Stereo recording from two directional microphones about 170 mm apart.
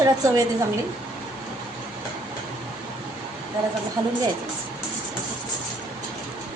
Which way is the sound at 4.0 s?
20° right (ahead or behind).